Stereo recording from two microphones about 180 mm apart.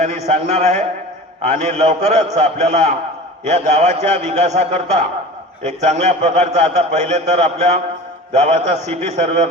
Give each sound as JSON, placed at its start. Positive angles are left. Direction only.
{"t": 0.3, "sound": "a man's voice", "side_deg": -40}